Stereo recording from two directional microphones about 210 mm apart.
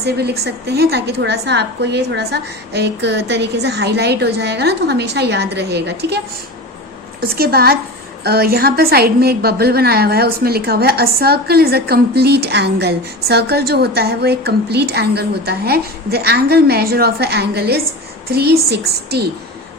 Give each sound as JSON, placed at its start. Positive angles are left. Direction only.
{"t": 0.0, "sound": "a woman's voice", "side_deg": -50}
{"t": 7.2, "sound": "a woman's voice", "side_deg": -45}